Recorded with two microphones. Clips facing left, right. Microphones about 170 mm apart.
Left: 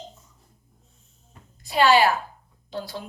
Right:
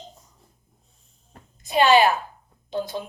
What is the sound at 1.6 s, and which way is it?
A woman's voice, 20° right (ahead or behind).